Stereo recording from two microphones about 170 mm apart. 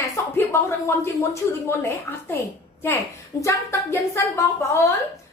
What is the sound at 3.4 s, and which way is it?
Speech, 15° left (ahead or behind).